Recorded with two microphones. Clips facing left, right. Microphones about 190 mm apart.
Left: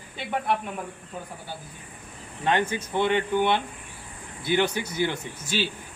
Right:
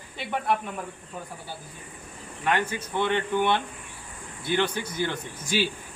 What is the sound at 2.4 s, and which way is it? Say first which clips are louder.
Speech: left 2 dB; 20° left (ahead or behind).